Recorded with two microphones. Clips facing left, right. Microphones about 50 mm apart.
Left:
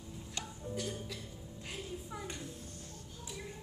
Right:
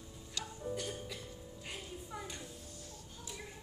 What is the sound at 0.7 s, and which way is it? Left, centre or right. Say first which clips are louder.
Music: left 1 dB; centre.